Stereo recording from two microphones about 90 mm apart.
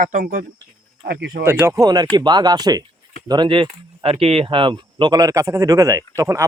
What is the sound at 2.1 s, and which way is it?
Speech, 50° right (ahead or behind).